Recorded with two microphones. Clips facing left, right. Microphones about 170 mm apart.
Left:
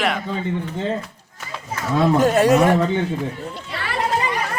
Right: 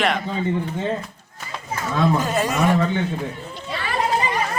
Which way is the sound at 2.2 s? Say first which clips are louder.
Left 7 dB; 70° left (ahead or behind).